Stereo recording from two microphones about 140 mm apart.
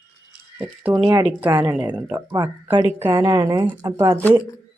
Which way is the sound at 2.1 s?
30° right (ahead or behind).